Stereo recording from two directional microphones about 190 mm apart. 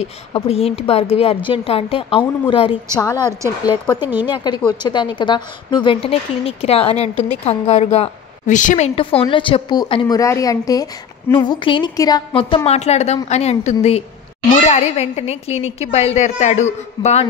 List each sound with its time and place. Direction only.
0.0 s a woman's voice: 30° left (ahead or behind)
3.0 s a woman's voice: 20° left (ahead or behind)
4.3 s a woman's voice: 25° left (ahead or behind)